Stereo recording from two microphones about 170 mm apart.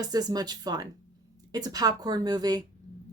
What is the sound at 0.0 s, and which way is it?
A woman's voice, 20° right (ahead or behind).